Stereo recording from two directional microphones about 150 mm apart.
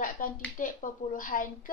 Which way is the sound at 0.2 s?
60° left (ahead or behind).